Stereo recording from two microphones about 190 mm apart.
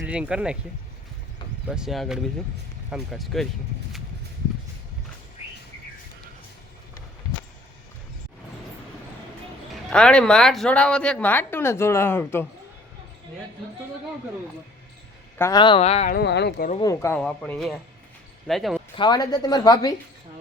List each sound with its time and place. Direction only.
0.0 s speech: 5° right (ahead or behind)
1.7 s speech: centre (ahead or behind)
9.9 s a woman's voice: 5° left (ahead or behind)
15.4 s a woman's voice: 20° left (ahead or behind)
16.0 s speech: 60° left (ahead or behind)
16.8 s a woman's voice: 15° left (ahead or behind)
18.9 s a woman's voice: 20° left (ahead or behind)